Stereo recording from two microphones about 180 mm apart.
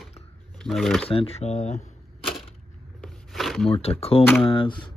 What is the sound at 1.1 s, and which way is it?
Speech, 30° left (ahead or behind).